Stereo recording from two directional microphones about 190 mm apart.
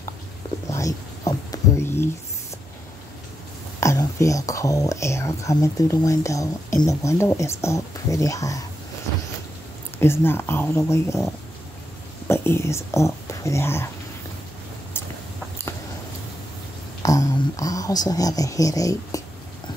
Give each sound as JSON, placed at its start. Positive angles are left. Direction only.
{"t": 0.7, "sound": "a sound", "side_deg": 15}
{"t": 3.8, "sound": "speech", "side_deg": 15}
{"t": 9.9, "sound": "speech", "side_deg": 10}
{"t": 12.3, "sound": "speech", "side_deg": 15}
{"t": 17.0, "sound": "speech", "side_deg": 15}